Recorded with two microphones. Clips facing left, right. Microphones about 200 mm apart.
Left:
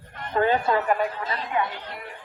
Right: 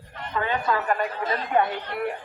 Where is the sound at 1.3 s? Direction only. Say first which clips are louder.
Right 4 dB; 50° right (ahead or behind).